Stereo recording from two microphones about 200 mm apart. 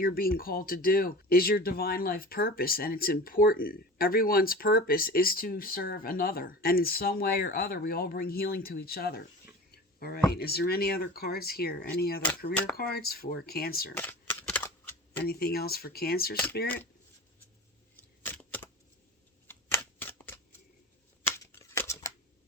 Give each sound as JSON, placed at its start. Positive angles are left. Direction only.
{"t": 0.0, "sound": "speech", "side_deg": 45}
{"t": 13.9, "sound": "shuffling cards", "side_deg": 10}
{"t": 15.3, "sound": "speech", "side_deg": 50}
{"t": 18.3, "sound": "shuffling cards", "side_deg": 10}